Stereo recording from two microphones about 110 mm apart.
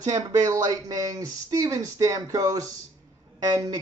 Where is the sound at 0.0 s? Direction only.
35° right (ahead or behind).